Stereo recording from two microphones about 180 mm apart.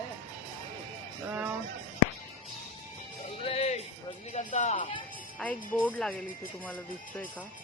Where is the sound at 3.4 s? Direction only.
35° left (ahead or behind).